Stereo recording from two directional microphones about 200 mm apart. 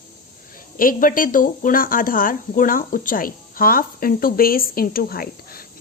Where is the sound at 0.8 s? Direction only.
45° left (ahead or behind).